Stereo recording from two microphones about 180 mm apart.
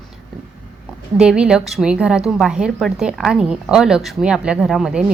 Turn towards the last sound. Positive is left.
turn(degrees=-5)  # may be behind; listen again after turning